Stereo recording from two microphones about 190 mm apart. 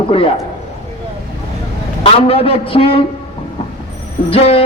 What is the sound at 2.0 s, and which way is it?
A man's voice, 30° left (ahead or behind).